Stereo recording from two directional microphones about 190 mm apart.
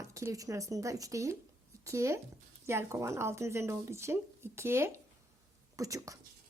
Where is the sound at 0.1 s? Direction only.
15° right (ahead or behind).